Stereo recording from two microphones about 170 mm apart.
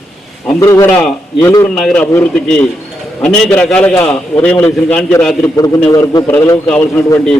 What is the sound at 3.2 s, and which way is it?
A man's voice, 5° left (ahead or behind).